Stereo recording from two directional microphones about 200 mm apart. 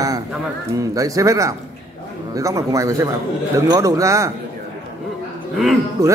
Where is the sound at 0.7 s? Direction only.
15° right (ahead or behind).